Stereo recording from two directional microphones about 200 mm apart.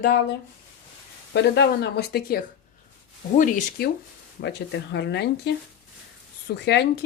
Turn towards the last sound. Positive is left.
turn(degrees=55)  # may be behind; listen again after turning